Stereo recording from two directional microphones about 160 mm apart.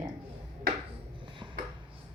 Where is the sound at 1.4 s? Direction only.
20° right (ahead or behind).